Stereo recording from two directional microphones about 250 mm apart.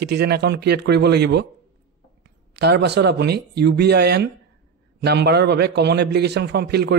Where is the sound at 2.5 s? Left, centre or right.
Right.